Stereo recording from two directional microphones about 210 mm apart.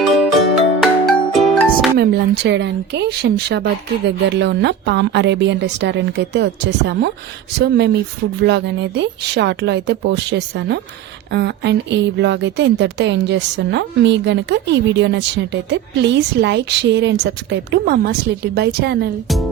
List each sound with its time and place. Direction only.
0.0 s music: centre (ahead or behind)
2.4 s a woman's voice: 55° right (ahead or behind)
8.4 s a woman's voice: 55° right (ahead or behind)